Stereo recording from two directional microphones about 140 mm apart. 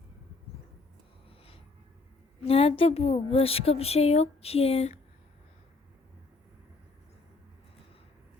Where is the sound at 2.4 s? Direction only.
45° left (ahead or behind).